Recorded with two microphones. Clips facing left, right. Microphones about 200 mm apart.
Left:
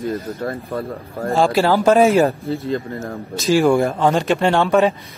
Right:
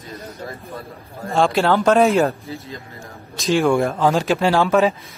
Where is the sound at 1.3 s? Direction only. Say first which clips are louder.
Left 1 dB; centre (ahead or behind).